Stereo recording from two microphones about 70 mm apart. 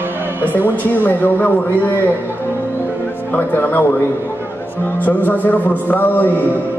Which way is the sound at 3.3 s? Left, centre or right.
Left.